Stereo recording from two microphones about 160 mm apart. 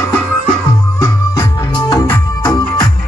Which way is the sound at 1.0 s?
20° left (ahead or behind).